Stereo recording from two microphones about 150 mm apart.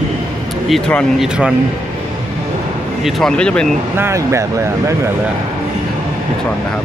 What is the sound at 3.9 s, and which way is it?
Speech, 20° right (ahead or behind).